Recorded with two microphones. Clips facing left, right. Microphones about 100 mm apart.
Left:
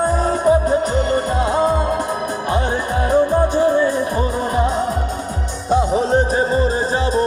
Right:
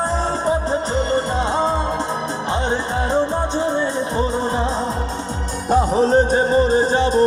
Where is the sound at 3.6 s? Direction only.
25° right (ahead or behind).